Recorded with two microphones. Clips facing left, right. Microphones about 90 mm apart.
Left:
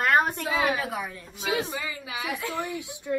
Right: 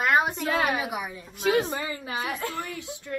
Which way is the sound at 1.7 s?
45° right (ahead or behind).